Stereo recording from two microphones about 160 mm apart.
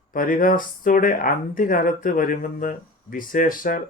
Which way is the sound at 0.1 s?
60° left (ahead or behind).